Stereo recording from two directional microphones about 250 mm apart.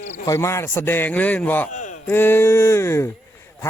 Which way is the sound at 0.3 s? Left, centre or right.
Centre.